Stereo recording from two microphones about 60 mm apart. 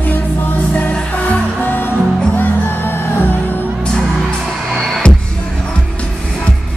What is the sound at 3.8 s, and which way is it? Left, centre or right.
Music, centre.